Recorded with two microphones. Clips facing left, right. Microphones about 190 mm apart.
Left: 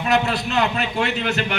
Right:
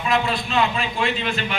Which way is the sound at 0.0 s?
70° left (ahead or behind).